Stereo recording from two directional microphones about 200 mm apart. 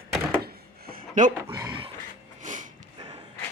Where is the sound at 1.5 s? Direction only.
15° right (ahead or behind).